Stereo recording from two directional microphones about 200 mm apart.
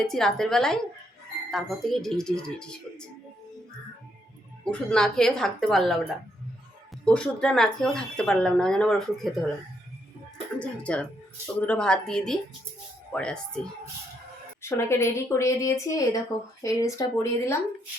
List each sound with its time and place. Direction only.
0.0 s speech: centre (ahead or behind)
4.6 s speech: 5° left (ahead or behind)
10.6 s speech: 5° left (ahead or behind)
14.6 s a woman's voice: 15° left (ahead or behind)